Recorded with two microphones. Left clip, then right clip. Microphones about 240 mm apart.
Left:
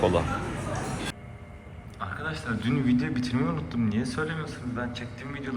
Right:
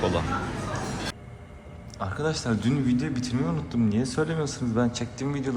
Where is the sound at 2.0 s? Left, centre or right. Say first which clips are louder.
Right 4 dB; right.